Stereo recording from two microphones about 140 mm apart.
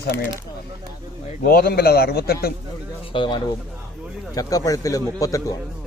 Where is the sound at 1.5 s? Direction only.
90° left.